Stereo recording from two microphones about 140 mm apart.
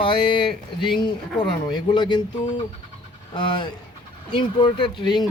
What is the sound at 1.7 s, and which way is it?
Speech, 30° left (ahead or behind).